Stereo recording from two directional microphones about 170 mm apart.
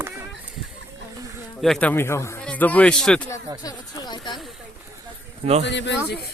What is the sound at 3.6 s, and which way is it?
Speech, 25° left (ahead or behind).